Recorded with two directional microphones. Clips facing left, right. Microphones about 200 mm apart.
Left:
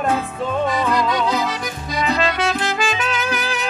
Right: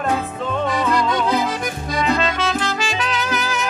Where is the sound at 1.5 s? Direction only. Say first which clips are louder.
Right 2 dB; 50° right (ahead or behind).